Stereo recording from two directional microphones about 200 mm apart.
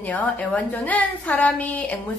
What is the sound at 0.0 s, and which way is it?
A woman's voice, 5° left (ahead or behind).